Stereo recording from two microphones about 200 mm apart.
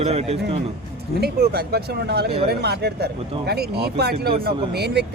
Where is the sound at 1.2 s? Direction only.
50° right (ahead or behind).